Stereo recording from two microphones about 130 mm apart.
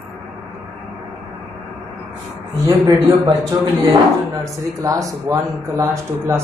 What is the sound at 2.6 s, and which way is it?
A man's voice, 30° right (ahead or behind).